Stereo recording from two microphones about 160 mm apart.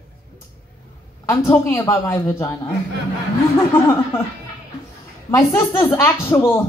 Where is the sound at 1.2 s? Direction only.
15° left (ahead or behind).